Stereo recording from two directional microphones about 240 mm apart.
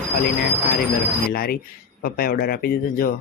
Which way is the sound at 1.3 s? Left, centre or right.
Left.